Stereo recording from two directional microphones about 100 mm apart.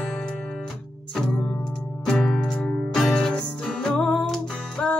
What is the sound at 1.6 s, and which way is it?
Music, 5° left (ahead or behind).